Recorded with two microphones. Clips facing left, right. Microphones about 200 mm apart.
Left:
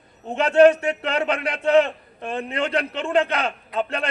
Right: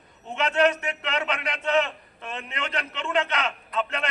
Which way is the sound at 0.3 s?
30° left (ahead or behind).